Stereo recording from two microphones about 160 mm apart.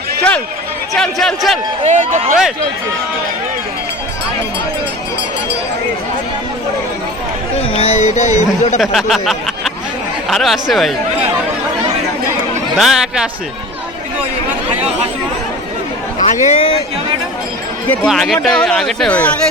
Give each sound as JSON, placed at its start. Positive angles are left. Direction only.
{"t": 0.2, "sound": "run", "side_deg": 5}
{"t": 0.9, "sound": "speech", "side_deg": 5}
{"t": 1.8, "sound": "speech", "side_deg": -45}
{"t": 7.8, "sound": "speech", "side_deg": 45}
{"t": 8.8, "sound": "speech", "side_deg": 0}
{"t": 12.7, "sound": "speech", "side_deg": -5}
{"t": 14.8, "sound": "speech", "side_deg": -40}
{"t": 16.1, "sound": "speech", "side_deg": 50}
{"t": 17.8, "sound": "speech", "side_deg": 5}